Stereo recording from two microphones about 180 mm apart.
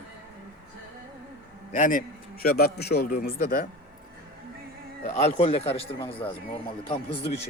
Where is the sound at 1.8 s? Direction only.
45° left (ahead or behind).